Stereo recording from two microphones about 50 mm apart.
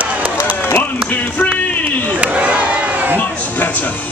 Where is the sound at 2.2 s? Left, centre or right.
Right.